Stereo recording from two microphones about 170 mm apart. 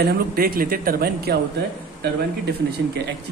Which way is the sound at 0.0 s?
65° right (ahead or behind).